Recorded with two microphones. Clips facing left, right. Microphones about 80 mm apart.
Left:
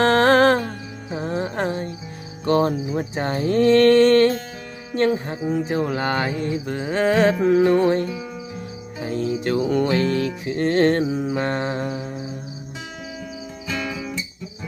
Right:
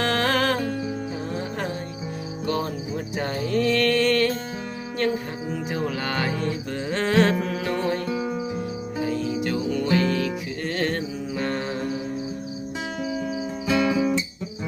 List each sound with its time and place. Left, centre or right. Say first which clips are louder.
0.0 s music: left 8 dB; left; by 7.4 s centre
7.4 s music: left 10 dB; left
9.0 s music: left 4 dB; left